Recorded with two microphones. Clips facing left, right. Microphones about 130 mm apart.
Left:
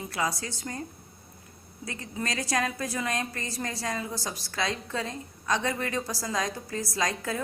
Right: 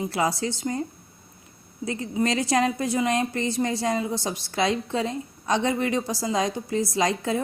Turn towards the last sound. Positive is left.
turn(degrees=-25)  # may be behind; listen again after turning